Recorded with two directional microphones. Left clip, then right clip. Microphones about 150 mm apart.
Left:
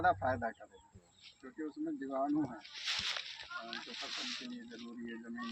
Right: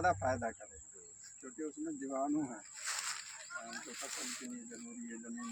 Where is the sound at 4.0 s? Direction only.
25° right (ahead or behind).